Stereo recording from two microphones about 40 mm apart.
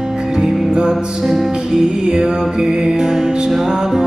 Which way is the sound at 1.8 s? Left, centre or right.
Centre.